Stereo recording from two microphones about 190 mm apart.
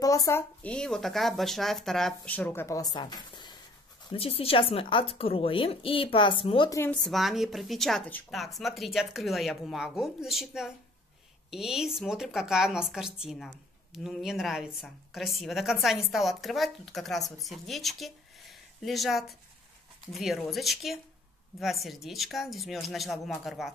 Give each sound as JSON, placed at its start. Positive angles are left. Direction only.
{"t": 0.0, "sound": "a woman's voice", "side_deg": 20}
{"t": 6.7, "sound": "speech", "side_deg": 10}